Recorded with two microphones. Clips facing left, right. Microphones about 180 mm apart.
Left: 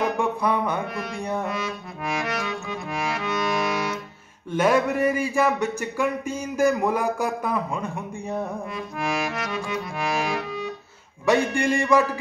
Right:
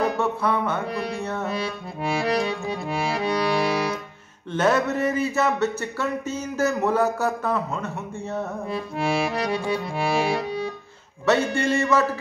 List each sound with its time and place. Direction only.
0.2 s speech: 15° left (ahead or behind)
0.9 s accordion: 35° right (ahead or behind)
1.2 s speech: 15° left (ahead or behind)
1.5 s accordion: 30° right (ahead or behind)
4.5 s speech: 10° left (ahead or behind)
8.7 s accordion: 30° right (ahead or behind)
11.2 s speech: 15° left (ahead or behind)